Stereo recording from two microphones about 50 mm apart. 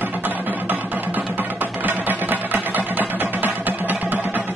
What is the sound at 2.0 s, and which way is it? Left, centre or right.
Music, right.